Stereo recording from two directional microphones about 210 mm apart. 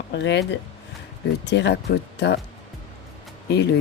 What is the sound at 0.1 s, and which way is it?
Speech, 55° left (ahead or behind).